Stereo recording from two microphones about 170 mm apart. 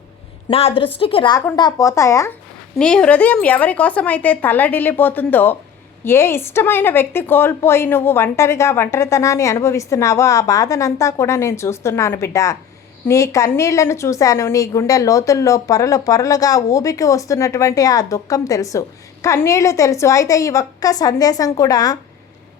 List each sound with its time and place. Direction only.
0.4 s a woman's voice: 35° left (ahead or behind)
2.7 s a woman's voice: 5° left (ahead or behind); by 21.9 s 20° left (ahead or behind)